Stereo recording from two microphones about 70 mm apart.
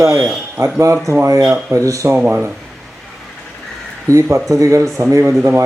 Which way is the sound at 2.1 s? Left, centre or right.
Centre.